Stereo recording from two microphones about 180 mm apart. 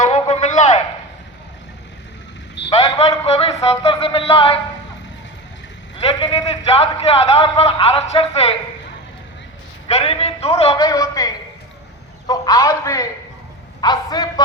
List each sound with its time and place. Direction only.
0.0 s a sound: 35° left (ahead or behind)
2.6 s a sound: 30° left (ahead or behind)
6.0 s a man's voice: 30° left (ahead or behind)
9.9 s a man's voice: 35° left (ahead or behind)
10.8 s a man's voice: 20° left (ahead or behind)
12.3 s a man's voice: 20° left (ahead or behind)